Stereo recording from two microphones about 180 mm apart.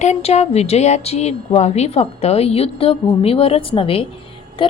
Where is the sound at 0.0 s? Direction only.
35° left (ahead or behind).